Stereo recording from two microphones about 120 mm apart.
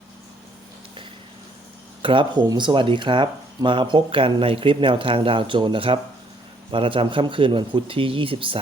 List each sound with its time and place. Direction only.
2.0 s speech: 45° right (ahead or behind)